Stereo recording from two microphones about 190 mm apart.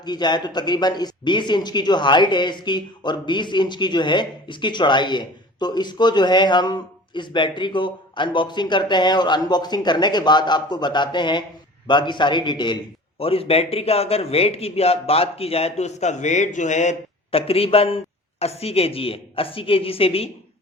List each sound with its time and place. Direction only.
0.0 s a man's voice: 20° left (ahead or behind)